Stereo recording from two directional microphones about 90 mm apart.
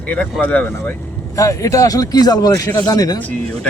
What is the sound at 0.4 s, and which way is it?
Speech, 20° left (ahead or behind).